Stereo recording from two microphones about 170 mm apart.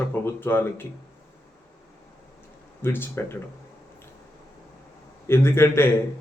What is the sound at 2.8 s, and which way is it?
Speech, 15° left (ahead or behind).